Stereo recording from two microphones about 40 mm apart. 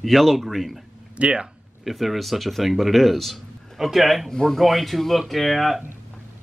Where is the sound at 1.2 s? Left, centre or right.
Right.